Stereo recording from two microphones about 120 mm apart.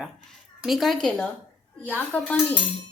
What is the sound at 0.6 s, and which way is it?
Speech, centre (ahead or behind).